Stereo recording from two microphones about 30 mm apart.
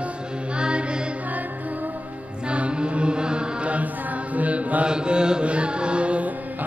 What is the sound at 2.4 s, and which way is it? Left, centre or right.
Music, right.